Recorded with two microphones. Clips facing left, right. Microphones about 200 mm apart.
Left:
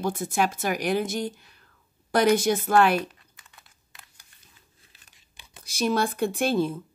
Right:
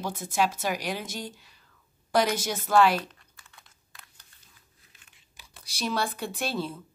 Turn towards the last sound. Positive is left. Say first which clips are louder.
# left 8 dB
turn(degrees=50)  # may be behind; listen again after turning